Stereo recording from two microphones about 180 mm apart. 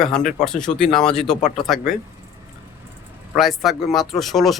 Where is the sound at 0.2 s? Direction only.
45° left (ahead or behind).